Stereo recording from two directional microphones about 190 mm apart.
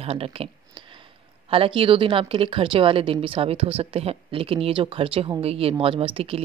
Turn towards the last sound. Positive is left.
turn(degrees=-30)  # may be behind; listen again after turning